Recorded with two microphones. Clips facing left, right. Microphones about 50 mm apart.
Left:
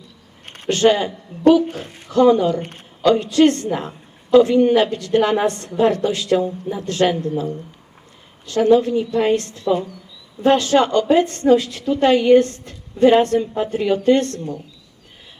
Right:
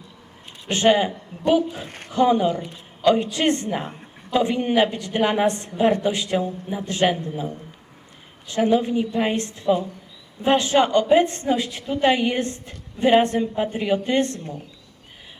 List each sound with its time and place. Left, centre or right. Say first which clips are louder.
0.7 s a woman's voice: left 2 dB; centre
2.6 s speech: left 4 dB; left
3.0 s a woman's voice: left 5 dB; centre